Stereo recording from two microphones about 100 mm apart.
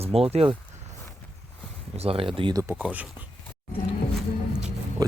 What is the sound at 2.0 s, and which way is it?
Speech, 75° right (ahead or behind).